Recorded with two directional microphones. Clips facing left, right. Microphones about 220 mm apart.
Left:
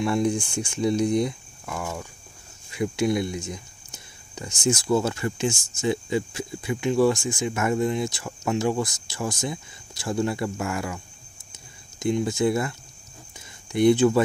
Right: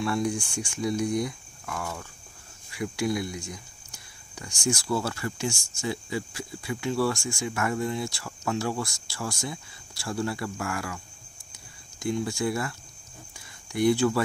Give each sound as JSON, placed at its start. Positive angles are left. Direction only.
{"t": 0.0, "sound": "speech", "side_deg": 20}
{"t": 11.5, "sound": "a sound", "side_deg": 20}
{"t": 13.7, "sound": "speech", "side_deg": 20}